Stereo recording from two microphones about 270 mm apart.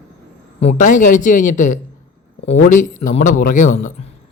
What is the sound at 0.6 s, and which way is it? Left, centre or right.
A man's voice, left.